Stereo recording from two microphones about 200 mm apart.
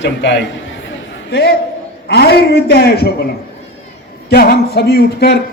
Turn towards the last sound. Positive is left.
turn(degrees=55)  # may be behind; listen again after turning